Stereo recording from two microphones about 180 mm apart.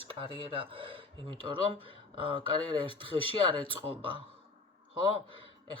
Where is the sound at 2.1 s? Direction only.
30° right (ahead or behind).